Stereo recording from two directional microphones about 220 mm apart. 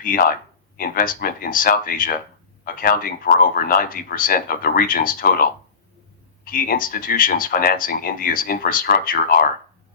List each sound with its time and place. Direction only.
0.0 s speech: 40° left (ahead or behind)